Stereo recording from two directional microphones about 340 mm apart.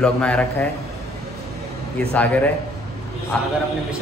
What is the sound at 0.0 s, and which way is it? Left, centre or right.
Speech, centre.